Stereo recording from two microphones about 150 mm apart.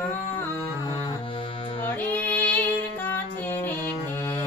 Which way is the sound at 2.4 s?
10° left (ahead or behind).